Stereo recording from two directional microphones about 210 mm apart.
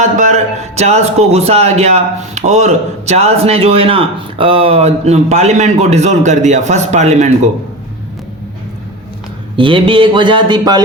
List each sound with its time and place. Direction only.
0.0 s speech: 35° right (ahead or behind)
9.6 s speech: 25° right (ahead or behind)